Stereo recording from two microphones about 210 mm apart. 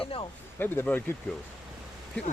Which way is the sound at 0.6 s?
10° left (ahead or behind).